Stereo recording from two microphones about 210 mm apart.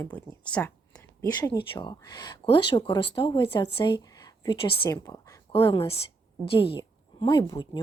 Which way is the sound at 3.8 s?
20° left (ahead or behind).